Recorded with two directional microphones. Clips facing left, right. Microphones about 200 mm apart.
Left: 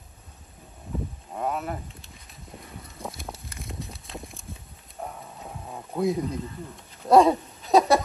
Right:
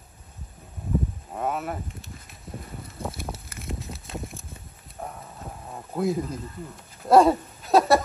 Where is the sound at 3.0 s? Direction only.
Centre (ahead or behind).